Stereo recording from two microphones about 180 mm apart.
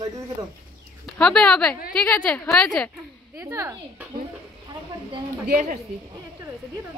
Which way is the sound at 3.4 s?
15° right (ahead or behind).